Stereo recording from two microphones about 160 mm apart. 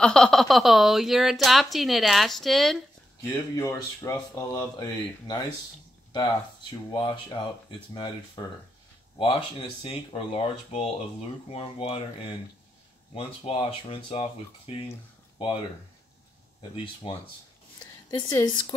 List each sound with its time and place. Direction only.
0.0 s speech: 5° left (ahead or behind)
3.2 s speech: 20° left (ahead or behind)
6.9 s speech: 30° left (ahead or behind)
17.0 s speech: 35° left (ahead or behind)